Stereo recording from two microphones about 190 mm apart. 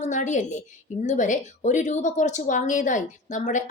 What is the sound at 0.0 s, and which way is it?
A woman's voice, 40° left (ahead or behind).